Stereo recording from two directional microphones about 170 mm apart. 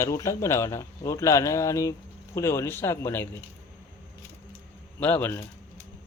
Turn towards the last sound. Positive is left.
turn(degrees=10)  # may be behind; listen again after turning